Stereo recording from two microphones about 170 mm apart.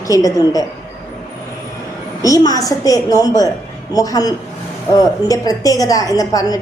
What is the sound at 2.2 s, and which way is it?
A woman's voice, 20° left (ahead or behind).